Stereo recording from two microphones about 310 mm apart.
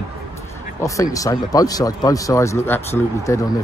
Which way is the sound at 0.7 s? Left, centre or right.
Centre.